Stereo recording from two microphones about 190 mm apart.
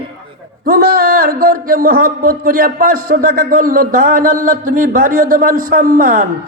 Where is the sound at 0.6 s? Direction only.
50° right (ahead or behind).